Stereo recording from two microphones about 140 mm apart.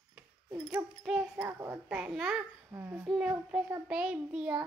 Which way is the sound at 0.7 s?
20° right (ahead or behind).